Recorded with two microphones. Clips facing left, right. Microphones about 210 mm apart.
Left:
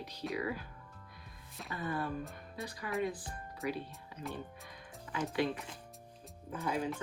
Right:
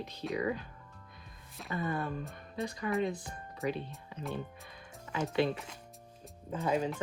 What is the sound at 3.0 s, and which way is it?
Speech, 25° right (ahead or behind).